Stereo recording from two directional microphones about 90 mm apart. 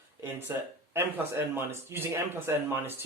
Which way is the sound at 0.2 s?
25° right (ahead or behind).